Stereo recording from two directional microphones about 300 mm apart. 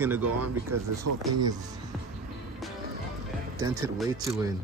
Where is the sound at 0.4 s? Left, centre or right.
Right.